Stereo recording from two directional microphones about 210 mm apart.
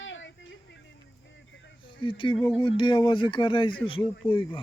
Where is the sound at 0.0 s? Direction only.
60° left (ahead or behind).